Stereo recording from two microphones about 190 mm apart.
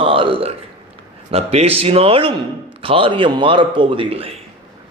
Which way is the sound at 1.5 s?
30° right (ahead or behind).